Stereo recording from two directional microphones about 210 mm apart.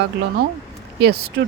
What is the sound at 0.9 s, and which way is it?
Speech, 50° right (ahead or behind).